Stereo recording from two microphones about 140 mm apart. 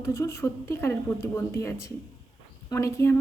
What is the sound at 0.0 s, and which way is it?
Speech, 20° left (ahead or behind).